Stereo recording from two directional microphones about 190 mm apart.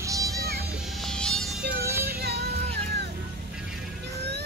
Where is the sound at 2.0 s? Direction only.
55° right (ahead or behind).